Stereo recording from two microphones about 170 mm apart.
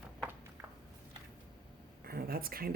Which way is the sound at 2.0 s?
60° right (ahead or behind).